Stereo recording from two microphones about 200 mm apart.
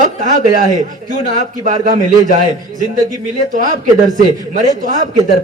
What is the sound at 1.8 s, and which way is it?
A man's voice, 45° right (ahead or behind).